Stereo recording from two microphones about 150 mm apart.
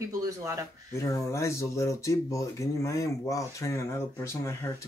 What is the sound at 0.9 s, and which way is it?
Speech, 20° left (ahead or behind).